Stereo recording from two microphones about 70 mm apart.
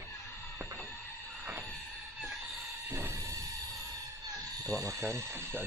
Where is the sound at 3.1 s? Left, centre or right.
Right.